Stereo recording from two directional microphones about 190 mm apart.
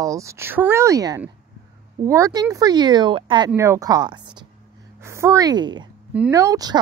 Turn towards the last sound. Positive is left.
turn(degrees=-20)  # may be behind; listen again after turning